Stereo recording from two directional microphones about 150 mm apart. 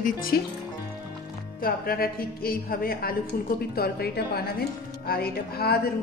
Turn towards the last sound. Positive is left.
turn(degrees=90)